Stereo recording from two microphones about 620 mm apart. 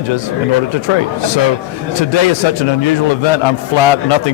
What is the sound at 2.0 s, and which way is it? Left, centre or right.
Speech, left.